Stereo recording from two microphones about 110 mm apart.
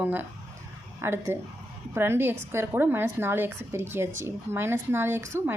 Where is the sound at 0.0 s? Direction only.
15° right (ahead or behind).